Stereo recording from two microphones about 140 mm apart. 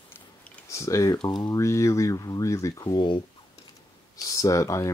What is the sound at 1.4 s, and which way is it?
Speech, 20° left (ahead or behind).